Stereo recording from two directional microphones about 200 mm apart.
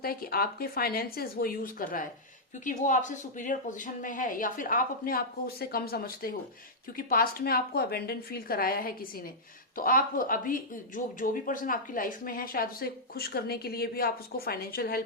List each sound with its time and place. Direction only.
0.0 s speech: 50° left (ahead or behind)